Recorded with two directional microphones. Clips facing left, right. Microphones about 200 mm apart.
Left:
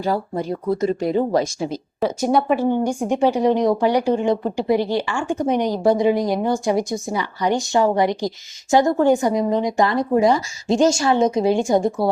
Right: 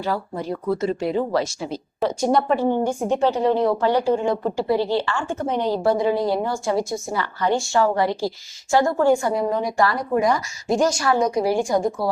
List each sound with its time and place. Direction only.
0.0 s a woman's voice: 15° left (ahead or behind)
0.7 s speech: 40° left (ahead or behind)
2.0 s a woman's voice: 5° left (ahead or behind); by 12.0 s 25° left (ahead or behind)